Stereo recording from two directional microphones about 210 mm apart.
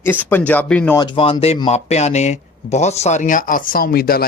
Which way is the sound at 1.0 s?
25° left (ahead or behind).